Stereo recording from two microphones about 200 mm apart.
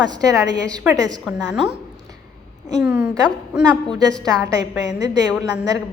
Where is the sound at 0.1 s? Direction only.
15° right (ahead or behind).